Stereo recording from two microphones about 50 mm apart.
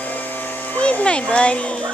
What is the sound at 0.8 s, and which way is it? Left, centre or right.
Speech, left.